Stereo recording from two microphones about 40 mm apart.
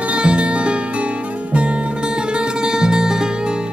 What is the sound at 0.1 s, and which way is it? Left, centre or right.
Music, right.